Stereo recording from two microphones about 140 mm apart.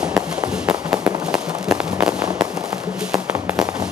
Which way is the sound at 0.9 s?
25° right (ahead or behind).